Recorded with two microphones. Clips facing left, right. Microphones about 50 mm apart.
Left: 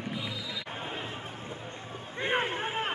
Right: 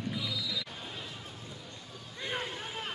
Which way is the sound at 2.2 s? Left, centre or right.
Left.